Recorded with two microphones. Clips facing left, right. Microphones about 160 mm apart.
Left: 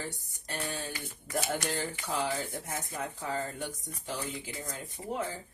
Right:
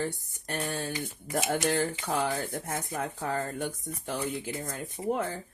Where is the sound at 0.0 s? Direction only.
55° right (ahead or behind).